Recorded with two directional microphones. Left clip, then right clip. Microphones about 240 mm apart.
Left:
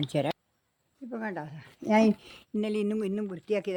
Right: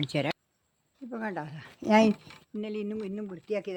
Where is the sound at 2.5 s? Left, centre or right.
Left.